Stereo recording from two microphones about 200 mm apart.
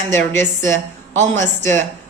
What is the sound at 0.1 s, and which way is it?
Mantra, 15° left (ahead or behind).